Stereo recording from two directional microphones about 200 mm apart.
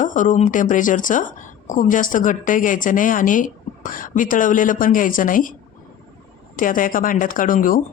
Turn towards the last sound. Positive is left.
turn(degrees=45)  # may be behind; listen again after turning